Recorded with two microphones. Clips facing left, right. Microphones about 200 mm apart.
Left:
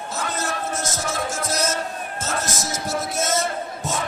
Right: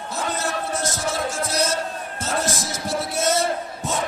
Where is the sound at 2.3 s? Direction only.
45° left (ahead or behind).